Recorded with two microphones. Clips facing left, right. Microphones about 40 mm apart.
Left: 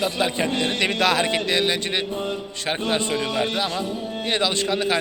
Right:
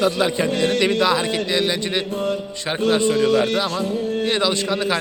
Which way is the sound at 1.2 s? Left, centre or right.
Left.